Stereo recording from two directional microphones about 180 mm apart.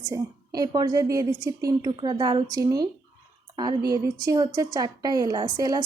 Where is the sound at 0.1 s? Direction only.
20° right (ahead or behind).